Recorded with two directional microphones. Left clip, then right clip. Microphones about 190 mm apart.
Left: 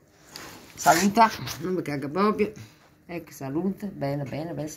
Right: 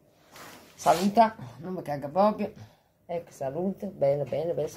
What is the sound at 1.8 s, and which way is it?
Speech, centre (ahead or behind).